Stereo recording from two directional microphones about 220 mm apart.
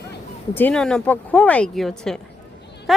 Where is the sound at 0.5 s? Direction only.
5° left (ahead or behind).